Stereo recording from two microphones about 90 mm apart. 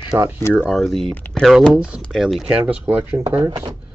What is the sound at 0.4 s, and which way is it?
Speech, 30° left (ahead or behind).